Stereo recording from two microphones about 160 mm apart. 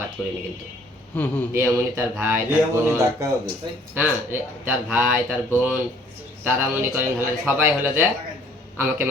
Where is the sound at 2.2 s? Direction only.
15° right (ahead or behind).